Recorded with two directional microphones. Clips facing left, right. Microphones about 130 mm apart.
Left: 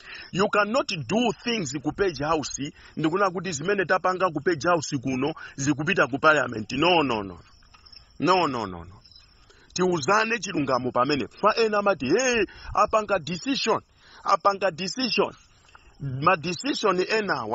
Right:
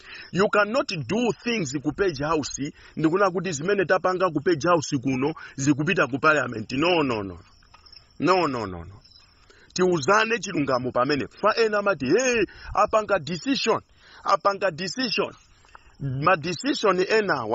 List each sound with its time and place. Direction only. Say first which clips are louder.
0.0 s a sound: even; centre (ahead or behind)
0.3 s a man's voice: right 2 dB; 10° left (ahead or behind)
1.4 s a man's voice: right 2 dB; centre (ahead or behind)
6.6 s a man's voice: even; 10° left (ahead or behind)
10.5 s a man's voice: left 1 dB; 10° left (ahead or behind)
16.7 s a man's voice: right 3 dB; centre (ahead or behind)